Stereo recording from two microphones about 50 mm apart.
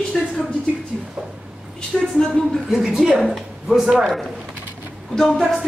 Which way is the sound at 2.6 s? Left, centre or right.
Centre.